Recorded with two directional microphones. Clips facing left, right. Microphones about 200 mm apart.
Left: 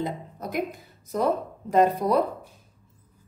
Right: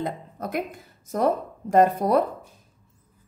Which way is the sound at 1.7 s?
50° right (ahead or behind).